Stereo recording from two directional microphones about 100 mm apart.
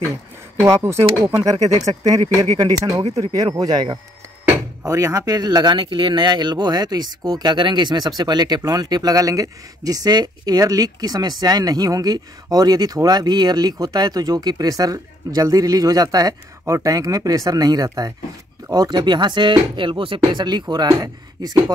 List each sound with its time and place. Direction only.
0.7 s speech: 30° right (ahead or behind); by 4.0 s 45° right (ahead or behind)
4.8 s speech: 30° right (ahead or behind)